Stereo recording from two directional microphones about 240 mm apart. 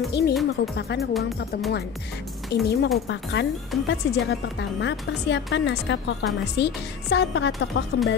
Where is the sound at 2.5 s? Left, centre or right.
Left.